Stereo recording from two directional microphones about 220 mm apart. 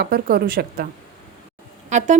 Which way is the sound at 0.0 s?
45° right (ahead or behind).